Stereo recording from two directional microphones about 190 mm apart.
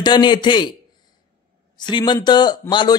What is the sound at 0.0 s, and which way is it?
A man's voice, 25° left (ahead or behind).